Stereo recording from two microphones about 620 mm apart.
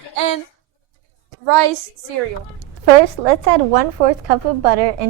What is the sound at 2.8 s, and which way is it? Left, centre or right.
A woman's voice, right.